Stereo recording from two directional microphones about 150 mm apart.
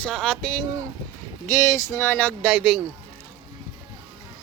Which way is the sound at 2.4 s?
5° right (ahead or behind).